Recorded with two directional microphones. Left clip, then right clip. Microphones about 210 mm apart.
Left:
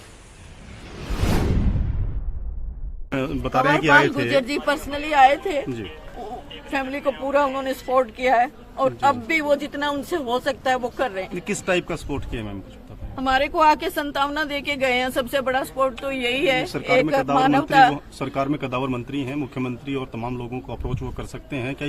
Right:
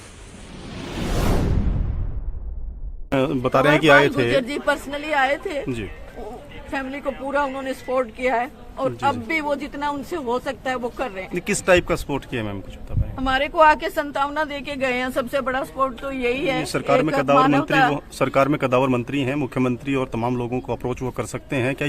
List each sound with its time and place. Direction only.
3.1 s a man's voice: 25° right (ahead or behind)
4.4 s speech: 5° right (ahead or behind)
6.7 s speech: 5° left (ahead or behind)
11.3 s speech: 35° right (ahead or behind)
13.1 s a woman's voice: centre (ahead or behind)
17.9 s a man's voice: 50° right (ahead or behind)